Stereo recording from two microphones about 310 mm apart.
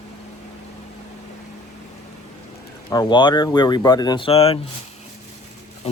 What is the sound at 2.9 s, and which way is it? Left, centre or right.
Speech, centre.